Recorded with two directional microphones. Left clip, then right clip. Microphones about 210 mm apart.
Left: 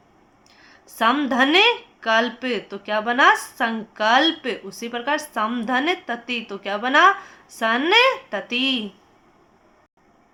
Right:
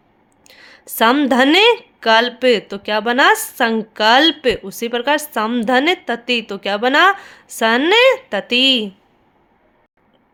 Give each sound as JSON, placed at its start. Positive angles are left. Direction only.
{"t": 0.4, "sound": "speech", "side_deg": -50}